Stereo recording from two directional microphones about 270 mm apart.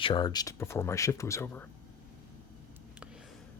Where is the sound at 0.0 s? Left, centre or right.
Centre.